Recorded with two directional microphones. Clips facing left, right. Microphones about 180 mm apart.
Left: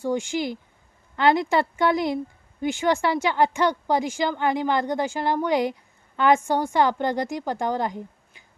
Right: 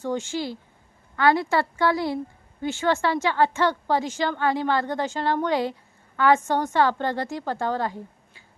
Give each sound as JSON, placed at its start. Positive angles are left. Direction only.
{"t": 0.0, "sound": "speech", "side_deg": 15}